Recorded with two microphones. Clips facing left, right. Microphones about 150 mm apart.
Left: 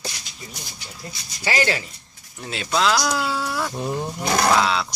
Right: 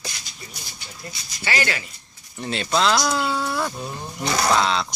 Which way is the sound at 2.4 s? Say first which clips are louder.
Right 1 dB; 5° left (ahead or behind).